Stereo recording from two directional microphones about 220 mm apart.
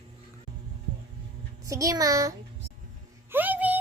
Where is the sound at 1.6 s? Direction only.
15° right (ahead or behind).